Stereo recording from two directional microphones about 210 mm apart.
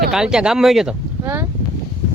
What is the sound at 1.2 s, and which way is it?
Boat, 10° right (ahead or behind).